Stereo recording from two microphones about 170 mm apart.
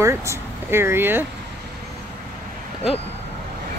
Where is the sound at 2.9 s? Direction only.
Centre (ahead or behind).